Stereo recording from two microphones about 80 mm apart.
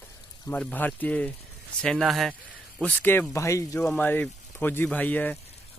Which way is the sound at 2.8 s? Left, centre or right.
Left.